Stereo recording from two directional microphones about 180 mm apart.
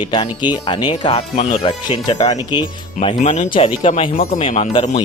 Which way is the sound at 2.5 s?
30° left (ahead or behind).